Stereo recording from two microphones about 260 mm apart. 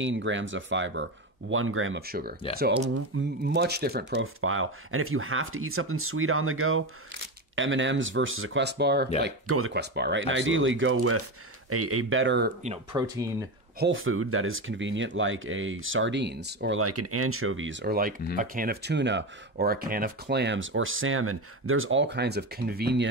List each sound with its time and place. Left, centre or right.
0.0 s speech: right
2.0 s speech: right
3.1 s speech: right
3.4 s speech: right
12.6 s speech: right
13.1 s speech: centre
13.7 s speech: right
16.8 s speech: right